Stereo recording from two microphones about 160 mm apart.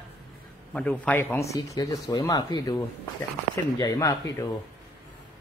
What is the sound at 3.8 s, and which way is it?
Speech, 20° left (ahead or behind).